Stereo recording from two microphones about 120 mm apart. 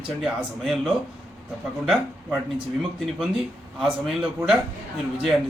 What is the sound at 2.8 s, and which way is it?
Speech, 5° right (ahead or behind).